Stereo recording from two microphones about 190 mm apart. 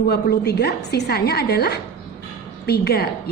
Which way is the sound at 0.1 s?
55° left (ahead or behind).